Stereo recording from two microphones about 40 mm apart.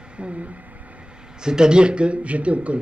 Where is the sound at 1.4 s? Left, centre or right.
Centre; by 2.8 s right.